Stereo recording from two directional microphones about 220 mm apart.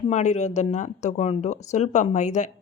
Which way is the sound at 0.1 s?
30° left (ahead or behind).